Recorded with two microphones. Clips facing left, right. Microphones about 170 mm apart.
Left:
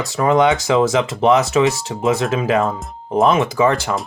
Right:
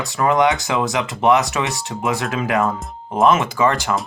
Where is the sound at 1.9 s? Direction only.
25° left (ahead or behind).